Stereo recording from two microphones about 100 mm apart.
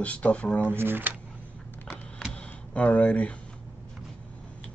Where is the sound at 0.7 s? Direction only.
20° right (ahead or behind).